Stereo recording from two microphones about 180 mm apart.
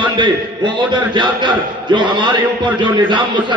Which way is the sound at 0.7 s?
25° right (ahead or behind).